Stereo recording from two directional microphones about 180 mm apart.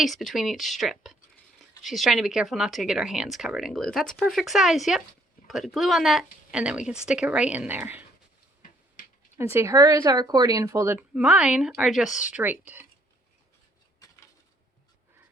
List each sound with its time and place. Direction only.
0.0 s speech: centre (ahead or behind)
9.0 s a sound: 50° left (ahead or behind)
9.4 s speech: 15° right (ahead or behind)